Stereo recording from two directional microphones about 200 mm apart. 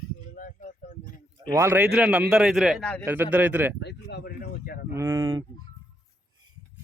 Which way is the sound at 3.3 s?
10° right (ahead or behind).